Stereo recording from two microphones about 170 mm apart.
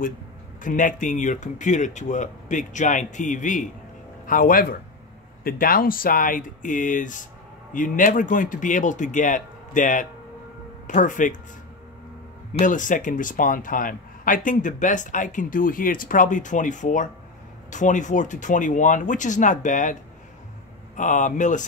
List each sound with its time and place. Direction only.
0.6 s speech: 50° left (ahead or behind)
12.5 s speech: 50° left (ahead or behind)